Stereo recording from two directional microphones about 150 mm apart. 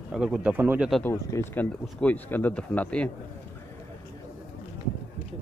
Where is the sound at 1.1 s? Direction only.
15° left (ahead or behind).